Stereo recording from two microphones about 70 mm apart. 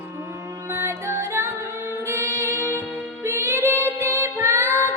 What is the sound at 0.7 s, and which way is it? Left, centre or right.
Music, right.